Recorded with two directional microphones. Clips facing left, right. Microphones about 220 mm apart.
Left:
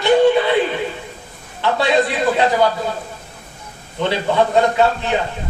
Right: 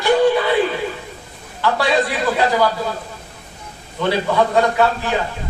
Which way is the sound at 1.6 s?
20° left (ahead or behind).